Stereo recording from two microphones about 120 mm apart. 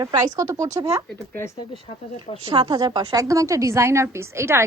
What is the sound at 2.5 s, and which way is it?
A woman's voice, 40° right (ahead or behind).